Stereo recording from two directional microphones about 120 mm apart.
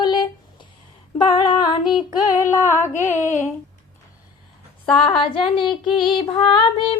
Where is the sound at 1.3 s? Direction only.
35° left (ahead or behind).